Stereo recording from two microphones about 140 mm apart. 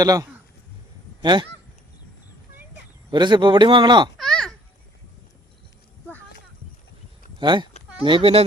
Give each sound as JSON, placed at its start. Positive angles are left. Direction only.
{"t": 0.0, "sound": "speech", "side_deg": -25}
{"t": 3.1, "sound": "speech", "side_deg": -35}
{"t": 4.2, "sound": "a sound", "side_deg": 5}
{"t": 7.3, "sound": "speech", "side_deg": -35}